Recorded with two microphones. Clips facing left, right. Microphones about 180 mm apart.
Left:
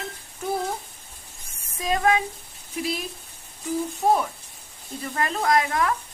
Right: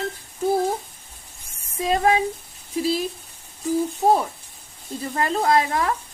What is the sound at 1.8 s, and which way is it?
Speech, 30° right (ahead or behind).